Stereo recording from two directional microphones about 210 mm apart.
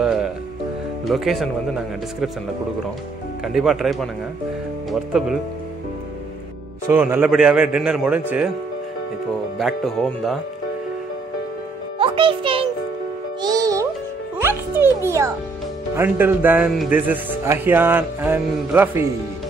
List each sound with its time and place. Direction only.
0.0 s music: 5° right (ahead or behind)
1.0 s a man's voice: centre (ahead or behind)
3.5 s a man's voice: centre (ahead or behind)
6.9 s a man's voice: 10° right (ahead or behind)
9.6 s a man's voice: centre (ahead or behind)
12.0 s music: 25° right (ahead or behind)
15.9 s speech: 10° right (ahead or behind)